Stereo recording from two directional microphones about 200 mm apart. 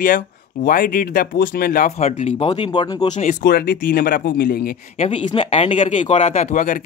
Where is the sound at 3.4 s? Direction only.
50° left (ahead or behind).